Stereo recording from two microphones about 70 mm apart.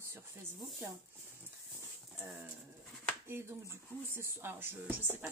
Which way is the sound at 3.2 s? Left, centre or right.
Right.